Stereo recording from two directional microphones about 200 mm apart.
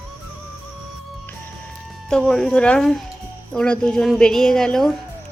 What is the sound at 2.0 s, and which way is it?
A woman's voice, 5° left (ahead or behind).